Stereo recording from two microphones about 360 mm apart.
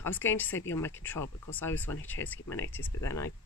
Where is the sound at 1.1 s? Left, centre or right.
Left.